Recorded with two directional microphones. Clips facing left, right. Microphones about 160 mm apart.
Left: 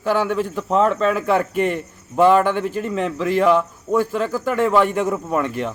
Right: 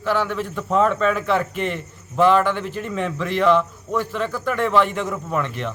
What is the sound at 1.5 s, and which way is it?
A man's voice, 45° left (ahead or behind).